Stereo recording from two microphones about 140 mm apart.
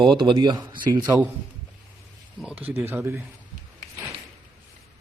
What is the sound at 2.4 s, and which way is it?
Speech, 10° right (ahead or behind).